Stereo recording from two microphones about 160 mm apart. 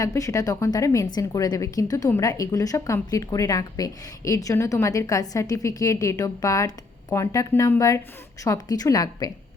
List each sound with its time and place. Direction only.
0.0 s a woman's voice: 20° left (ahead or behind)